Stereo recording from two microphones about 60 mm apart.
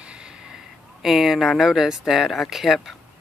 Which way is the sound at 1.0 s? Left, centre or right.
Centre.